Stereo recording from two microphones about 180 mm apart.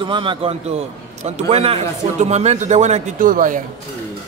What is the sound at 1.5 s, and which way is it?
A man's voice, 35° right (ahead or behind).